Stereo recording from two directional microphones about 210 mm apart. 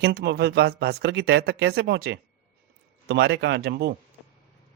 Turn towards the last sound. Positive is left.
turn(degrees=-50)  # may be behind; listen again after turning